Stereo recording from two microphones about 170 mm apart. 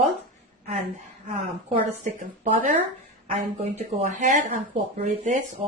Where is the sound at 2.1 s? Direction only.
50° right (ahead or behind).